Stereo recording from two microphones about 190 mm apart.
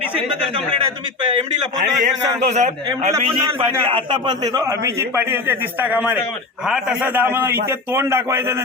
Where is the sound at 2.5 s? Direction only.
35° right (ahead or behind).